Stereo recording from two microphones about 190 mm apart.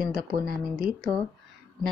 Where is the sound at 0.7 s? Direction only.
5° right (ahead or behind).